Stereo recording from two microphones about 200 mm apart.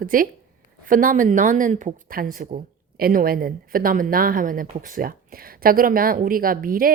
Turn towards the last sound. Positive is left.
turn(degrees=-45)  # may be behind; listen again after turning